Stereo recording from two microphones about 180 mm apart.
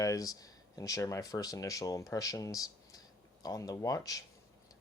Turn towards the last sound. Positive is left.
turn(degrees=20)  # may be behind; listen again after turning